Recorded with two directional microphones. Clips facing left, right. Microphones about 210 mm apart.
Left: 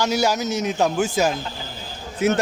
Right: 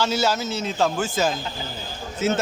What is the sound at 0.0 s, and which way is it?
Speech, 15° left (ahead or behind).